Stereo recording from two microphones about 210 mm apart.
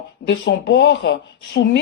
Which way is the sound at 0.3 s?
55° left (ahead or behind).